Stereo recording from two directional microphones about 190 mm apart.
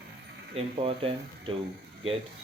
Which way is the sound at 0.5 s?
30° right (ahead or behind).